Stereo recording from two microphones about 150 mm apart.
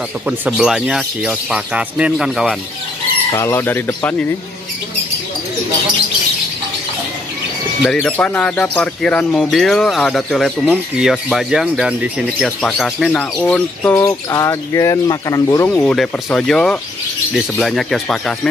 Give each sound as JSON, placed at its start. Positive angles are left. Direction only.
{"t": 0.5, "sound": "speech", "side_deg": -5}
{"t": 3.3, "sound": "speech", "side_deg": 15}
{"t": 7.8, "sound": "speech", "side_deg": 5}
{"t": 13.9, "sound": "speech", "side_deg": 20}